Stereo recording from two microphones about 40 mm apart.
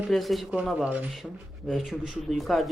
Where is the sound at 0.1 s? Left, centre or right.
Centre.